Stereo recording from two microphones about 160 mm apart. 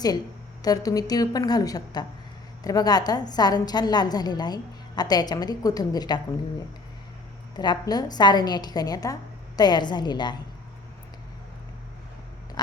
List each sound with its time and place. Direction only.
0.6 s a woman's voice: 25° left (ahead or behind)
7.5 s a woman's voice: 25° left (ahead or behind)